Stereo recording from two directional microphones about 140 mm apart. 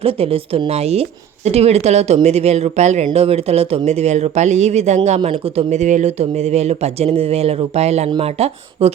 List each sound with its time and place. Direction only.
0.0 s a man's voice: 40° right (ahead or behind)